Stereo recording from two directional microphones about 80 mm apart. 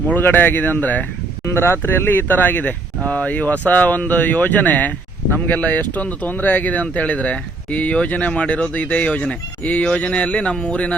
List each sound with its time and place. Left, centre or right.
0.1 s speech: left
1.5 s speech: left; by 10.9 s centre